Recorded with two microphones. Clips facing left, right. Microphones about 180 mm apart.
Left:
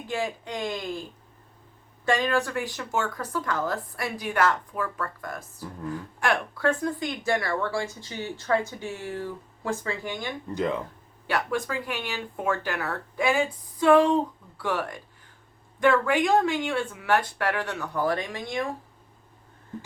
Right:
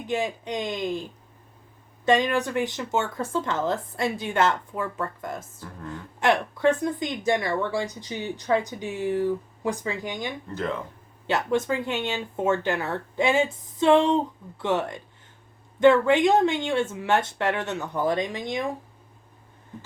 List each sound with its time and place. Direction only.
0.1 s speech: 20° right (ahead or behind)
2.0 s speech: 20° right (ahead or behind)
10.5 s speech: 15° left (ahead or behind)
11.3 s speech: 20° right (ahead or behind)